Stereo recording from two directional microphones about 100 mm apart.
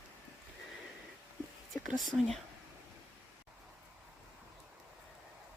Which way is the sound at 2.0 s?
Centre (ahead or behind).